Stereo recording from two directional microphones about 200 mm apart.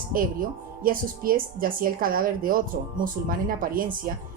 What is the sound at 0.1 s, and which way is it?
Speech, 45° right (ahead or behind).